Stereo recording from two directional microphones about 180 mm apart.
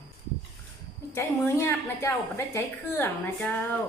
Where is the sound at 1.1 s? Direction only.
15° left (ahead or behind).